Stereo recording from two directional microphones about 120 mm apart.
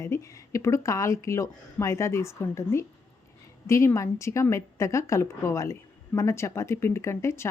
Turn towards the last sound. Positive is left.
turn(degrees=25)  # may be behind; listen again after turning